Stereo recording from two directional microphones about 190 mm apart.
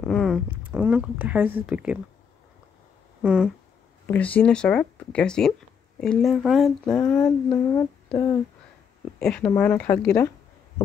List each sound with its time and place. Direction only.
0.0 s speech: centre (ahead or behind)
3.2 s speech: 5° right (ahead or behind)
4.0 s speech: 10° left (ahead or behind)
9.2 s a woman's voice: 5° left (ahead or behind)